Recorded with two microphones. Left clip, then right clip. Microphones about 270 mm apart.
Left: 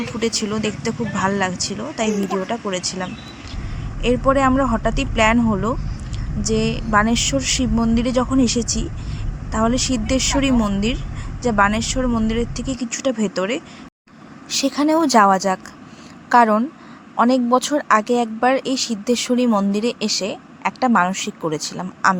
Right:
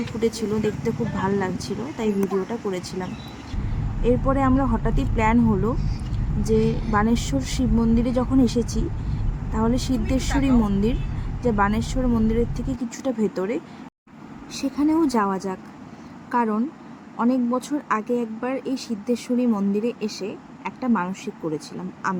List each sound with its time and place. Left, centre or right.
0.2 s speech: centre